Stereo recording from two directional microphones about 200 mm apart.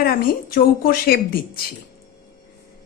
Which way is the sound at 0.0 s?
50° left (ahead or behind).